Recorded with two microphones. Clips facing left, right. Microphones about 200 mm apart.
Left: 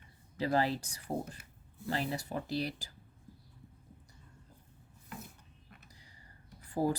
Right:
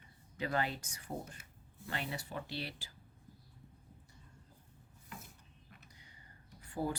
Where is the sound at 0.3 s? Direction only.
35° left (ahead or behind).